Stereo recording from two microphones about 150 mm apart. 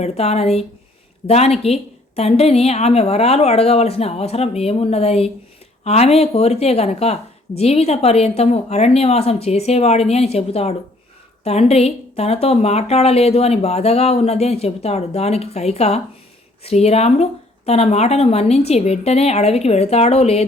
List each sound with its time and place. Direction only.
0.0 s a woman's voice: 45° left (ahead or behind)